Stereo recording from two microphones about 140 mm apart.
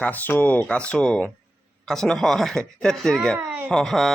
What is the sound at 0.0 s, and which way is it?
A child's voice, 10° left (ahead or behind).